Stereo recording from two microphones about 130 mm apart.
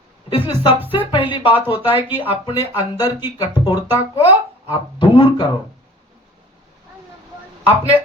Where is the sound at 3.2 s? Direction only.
30° left (ahead or behind).